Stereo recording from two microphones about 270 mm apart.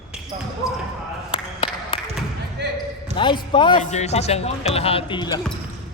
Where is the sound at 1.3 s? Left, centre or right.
Centre.